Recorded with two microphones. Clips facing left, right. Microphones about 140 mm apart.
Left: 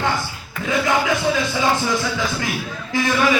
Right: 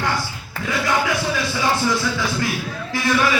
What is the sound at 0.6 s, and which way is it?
Speech, 20° left (ahead or behind).